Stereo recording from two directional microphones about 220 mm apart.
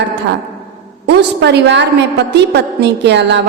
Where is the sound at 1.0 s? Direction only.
50° right (ahead or behind).